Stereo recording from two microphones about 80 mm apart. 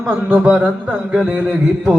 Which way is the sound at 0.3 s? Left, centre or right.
Right.